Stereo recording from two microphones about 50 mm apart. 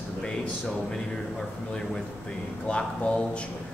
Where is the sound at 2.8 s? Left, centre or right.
Centre.